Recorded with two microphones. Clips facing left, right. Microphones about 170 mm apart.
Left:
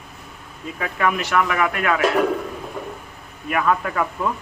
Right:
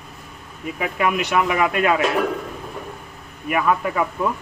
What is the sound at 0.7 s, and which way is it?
Speech, 15° right (ahead or behind).